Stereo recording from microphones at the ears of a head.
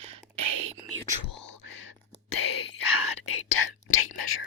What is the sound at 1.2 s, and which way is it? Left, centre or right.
Whispering, left.